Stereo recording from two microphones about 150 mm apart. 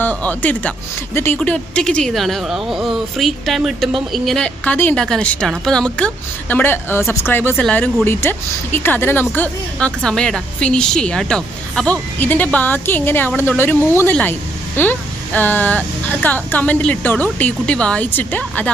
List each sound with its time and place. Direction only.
0.0 s a woman's voice: 10° left (ahead or behind)
1.4 s a woman's voice: 5° left (ahead or behind)